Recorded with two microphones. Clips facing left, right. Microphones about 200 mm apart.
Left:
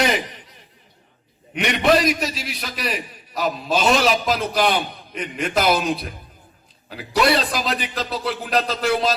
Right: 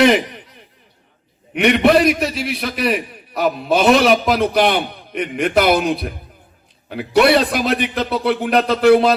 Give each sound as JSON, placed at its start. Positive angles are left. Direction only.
{"t": 1.5, "sound": "a man's voice", "side_deg": -60}